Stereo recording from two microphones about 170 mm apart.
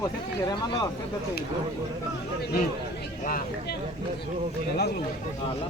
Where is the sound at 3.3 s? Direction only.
55° left (ahead or behind).